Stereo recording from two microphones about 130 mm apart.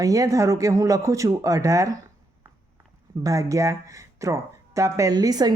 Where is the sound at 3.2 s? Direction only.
25° right (ahead or behind).